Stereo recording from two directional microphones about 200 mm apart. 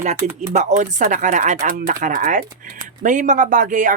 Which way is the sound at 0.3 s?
35° right (ahead or behind).